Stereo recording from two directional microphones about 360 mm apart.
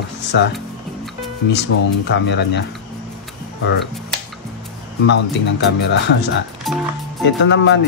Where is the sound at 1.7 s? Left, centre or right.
Left.